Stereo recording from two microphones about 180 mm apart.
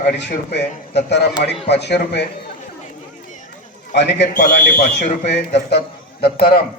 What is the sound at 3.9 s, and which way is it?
Speech, 75° left (ahead or behind).